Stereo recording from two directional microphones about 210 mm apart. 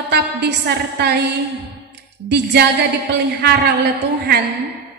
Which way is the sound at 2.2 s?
50° right (ahead or behind).